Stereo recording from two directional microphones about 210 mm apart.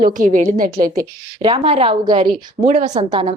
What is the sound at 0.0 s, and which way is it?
Speech, 40° right (ahead or behind).